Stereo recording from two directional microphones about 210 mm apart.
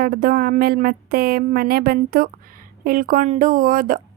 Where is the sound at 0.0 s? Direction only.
45° right (ahead or behind).